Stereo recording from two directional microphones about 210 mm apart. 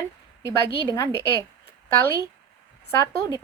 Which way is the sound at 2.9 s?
15° left (ahead or behind).